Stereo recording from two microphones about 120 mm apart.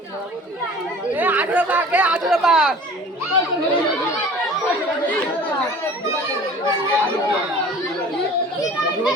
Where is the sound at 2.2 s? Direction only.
Centre (ahead or behind).